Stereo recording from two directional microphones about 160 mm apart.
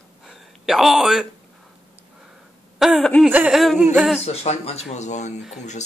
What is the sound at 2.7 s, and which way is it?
Speech, centre (ahead or behind).